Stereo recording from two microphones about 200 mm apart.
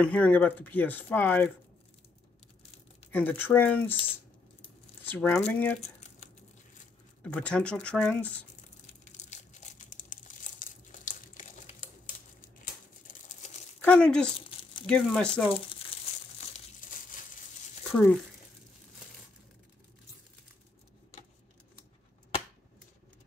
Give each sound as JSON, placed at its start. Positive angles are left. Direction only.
{"t": 0.0, "sound": "speech", "side_deg": 5}
{"t": 3.1, "sound": "speech", "side_deg": 10}
{"t": 5.0, "sound": "speech", "side_deg": 10}
{"t": 5.8, "sound": "a sound", "side_deg": 35}
{"t": 7.2, "sound": "speech", "side_deg": 5}
{"t": 8.8, "sound": "crumpling", "side_deg": 35}
{"t": 13.0, "sound": "a sound", "side_deg": 40}
{"t": 13.8, "sound": "speech", "side_deg": 5}
{"t": 14.4, "sound": "a sound", "side_deg": 25}
{"t": 14.9, "sound": "speech", "side_deg": 5}
{"t": 15.4, "sound": "crumpling", "side_deg": 25}